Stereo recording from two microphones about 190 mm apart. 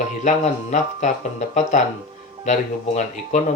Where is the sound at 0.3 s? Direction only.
40° left (ahead or behind).